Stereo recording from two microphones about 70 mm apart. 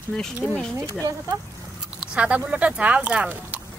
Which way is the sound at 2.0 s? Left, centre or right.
Centre.